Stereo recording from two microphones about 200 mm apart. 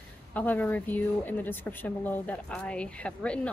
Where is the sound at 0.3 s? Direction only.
10° left (ahead or behind).